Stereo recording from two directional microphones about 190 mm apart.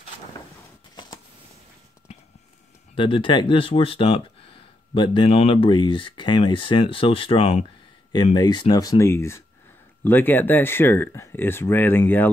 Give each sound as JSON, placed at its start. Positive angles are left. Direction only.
{"t": 3.0, "sound": "speech", "side_deg": 25}